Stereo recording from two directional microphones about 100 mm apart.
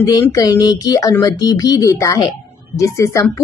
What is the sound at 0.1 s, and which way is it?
Speech, 40° left (ahead or behind).